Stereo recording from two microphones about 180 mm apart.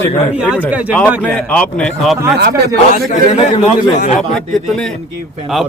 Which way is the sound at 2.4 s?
65° right (ahead or behind).